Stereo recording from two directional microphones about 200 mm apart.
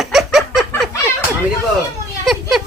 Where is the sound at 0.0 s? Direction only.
Centre (ahead or behind).